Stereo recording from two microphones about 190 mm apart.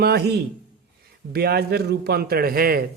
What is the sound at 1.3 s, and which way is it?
Speech, 55° right (ahead or behind).